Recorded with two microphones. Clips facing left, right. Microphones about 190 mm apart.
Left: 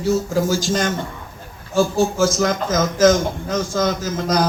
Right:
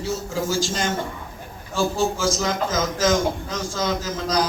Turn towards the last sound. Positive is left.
turn(degrees=50)  # may be behind; listen again after turning